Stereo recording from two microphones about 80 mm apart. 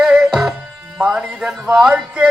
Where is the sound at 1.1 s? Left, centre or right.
Centre.